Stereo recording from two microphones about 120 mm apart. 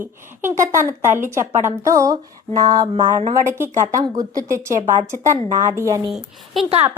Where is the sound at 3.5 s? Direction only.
20° right (ahead or behind).